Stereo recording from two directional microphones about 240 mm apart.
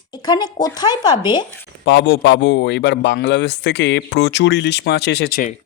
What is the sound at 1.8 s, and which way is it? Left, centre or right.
Speech, left.